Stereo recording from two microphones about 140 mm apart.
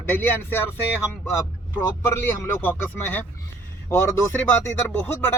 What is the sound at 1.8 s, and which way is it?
Speech, 20° left (ahead or behind).